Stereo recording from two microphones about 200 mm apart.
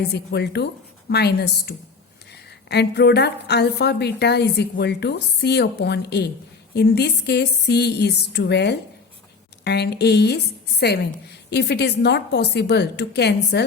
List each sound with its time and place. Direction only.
0.1 s a woman's voice: 55° left (ahead or behind)